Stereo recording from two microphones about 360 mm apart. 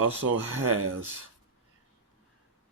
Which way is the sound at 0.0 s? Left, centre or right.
Right.